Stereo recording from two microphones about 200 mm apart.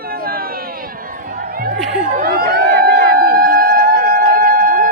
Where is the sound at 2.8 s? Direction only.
45° right (ahead or behind).